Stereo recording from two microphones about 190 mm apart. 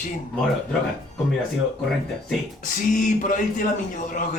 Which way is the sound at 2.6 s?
45° left (ahead or behind).